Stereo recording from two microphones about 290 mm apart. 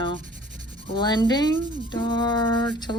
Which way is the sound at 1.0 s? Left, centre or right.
Centre.